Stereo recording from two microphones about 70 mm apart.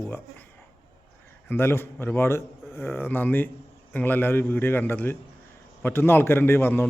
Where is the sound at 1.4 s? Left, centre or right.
Left.